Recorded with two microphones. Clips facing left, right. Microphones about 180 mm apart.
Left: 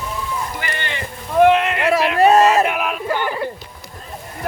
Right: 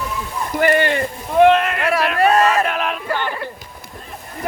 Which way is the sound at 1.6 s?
20° left (ahead or behind).